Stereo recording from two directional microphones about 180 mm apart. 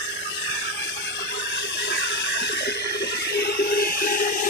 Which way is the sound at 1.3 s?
70° left (ahead or behind).